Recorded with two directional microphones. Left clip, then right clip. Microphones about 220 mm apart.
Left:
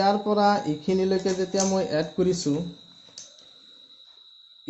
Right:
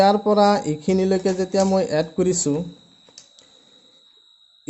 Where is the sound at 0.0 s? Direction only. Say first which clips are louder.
Right 6 dB; 35° right (ahead or behind).